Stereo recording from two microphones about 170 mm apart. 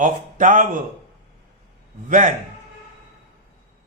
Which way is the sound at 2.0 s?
50° right (ahead or behind).